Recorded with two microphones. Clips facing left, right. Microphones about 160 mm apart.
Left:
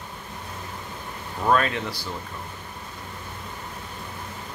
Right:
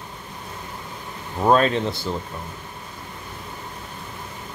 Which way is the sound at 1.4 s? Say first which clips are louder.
Right 5 dB; 25° right (ahead or behind).